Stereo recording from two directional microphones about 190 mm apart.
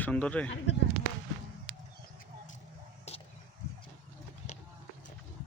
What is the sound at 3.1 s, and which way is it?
Vehicle, 35° left (ahead or behind).